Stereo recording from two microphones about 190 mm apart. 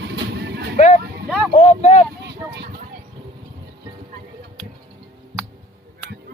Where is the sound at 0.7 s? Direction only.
35° left (ahead or behind).